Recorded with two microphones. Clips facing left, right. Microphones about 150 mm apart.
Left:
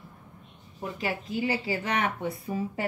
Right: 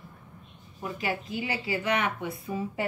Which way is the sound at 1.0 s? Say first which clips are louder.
Left 2 dB; 35° left (ahead or behind).